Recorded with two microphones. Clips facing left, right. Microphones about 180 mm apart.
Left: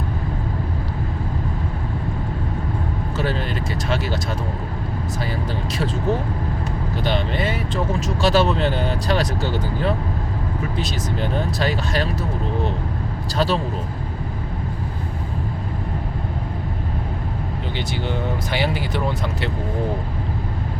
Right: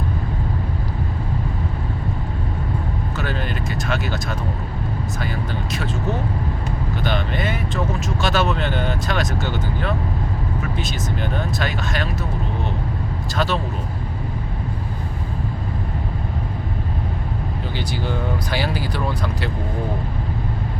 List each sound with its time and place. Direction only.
3.8 s speech: 30° left (ahead or behind)
5.7 s speech: 30° left (ahead or behind)
13.3 s speech: 30° left (ahead or behind)
17.7 s speech: 20° left (ahead or behind)